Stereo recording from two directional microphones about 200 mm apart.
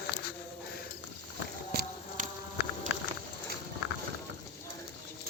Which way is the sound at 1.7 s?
50° right (ahead or behind).